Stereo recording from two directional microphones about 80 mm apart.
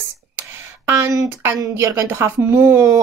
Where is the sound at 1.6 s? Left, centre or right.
Right.